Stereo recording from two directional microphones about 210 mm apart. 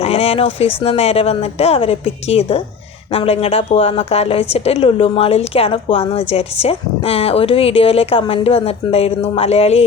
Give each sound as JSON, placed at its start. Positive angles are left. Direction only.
{"t": 0.0, "sound": "a woman's voice", "side_deg": 30}